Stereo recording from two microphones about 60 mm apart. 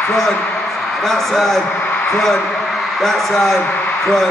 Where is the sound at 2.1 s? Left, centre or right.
Centre.